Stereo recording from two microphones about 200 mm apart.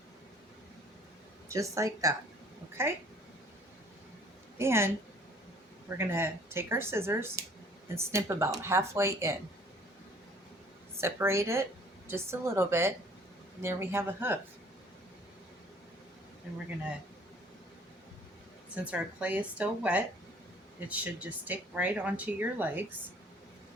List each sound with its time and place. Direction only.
1.5 s speech: 15° right (ahead or behind)
4.5 s a woman's voice: 15° right (ahead or behind)
6.0 s speech: 10° right (ahead or behind)
11.0 s speech: 15° right (ahead or behind)
18.7 s speech: 5° right (ahead or behind)